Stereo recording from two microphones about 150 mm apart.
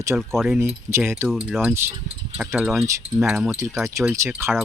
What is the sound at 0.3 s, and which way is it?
Speech, centre (ahead or behind).